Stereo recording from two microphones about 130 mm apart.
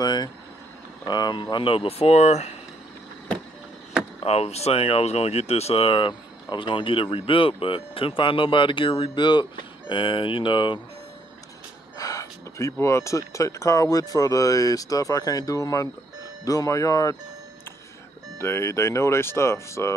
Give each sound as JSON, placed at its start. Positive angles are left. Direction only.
{"t": 0.0, "sound": "speech", "side_deg": 30}
{"t": 4.2, "sound": "speech", "side_deg": 50}
{"t": 12.0, "sound": "speech", "side_deg": 25}
{"t": 18.4, "sound": "speech", "side_deg": 20}